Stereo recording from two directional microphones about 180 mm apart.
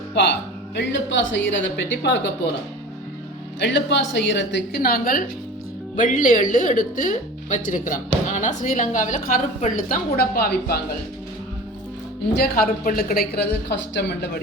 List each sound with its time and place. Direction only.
0.1 s speech: 70° left (ahead or behind)
0.8 s a woman's voice: 85° left
3.6 s a woman's voice: 85° left; by 10.8 s 60° left (ahead or behind)
12.3 s a woman's voice: 55° left (ahead or behind)